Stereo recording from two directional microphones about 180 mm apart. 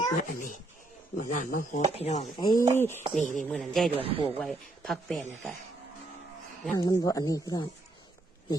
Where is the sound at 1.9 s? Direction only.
35° left (ahead or behind).